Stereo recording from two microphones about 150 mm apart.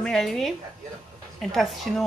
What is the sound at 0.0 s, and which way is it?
A woman's voice, 5° left (ahead or behind).